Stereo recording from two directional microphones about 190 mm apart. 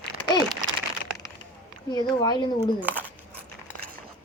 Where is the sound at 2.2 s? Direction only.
20° left (ahead or behind).